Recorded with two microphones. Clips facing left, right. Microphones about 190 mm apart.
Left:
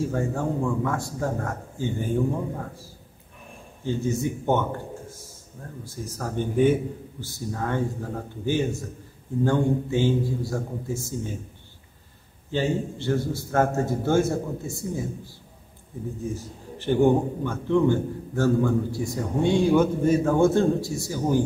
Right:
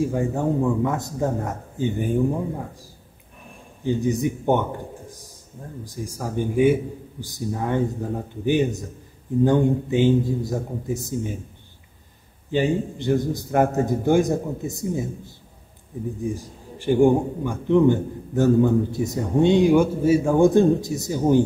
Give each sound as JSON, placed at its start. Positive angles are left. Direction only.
{"t": 0.0, "sound": "a man's voice", "side_deg": -15}
{"t": 12.4, "sound": "a man's voice", "side_deg": -15}